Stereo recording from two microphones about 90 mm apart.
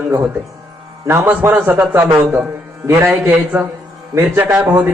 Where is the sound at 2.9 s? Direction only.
30° right (ahead or behind).